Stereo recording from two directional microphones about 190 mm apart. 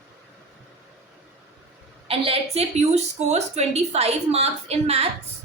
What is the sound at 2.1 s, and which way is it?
A woman's voice, 30° right (ahead or behind).